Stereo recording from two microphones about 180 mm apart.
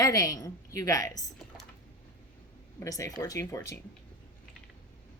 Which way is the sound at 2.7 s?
20° left (ahead or behind).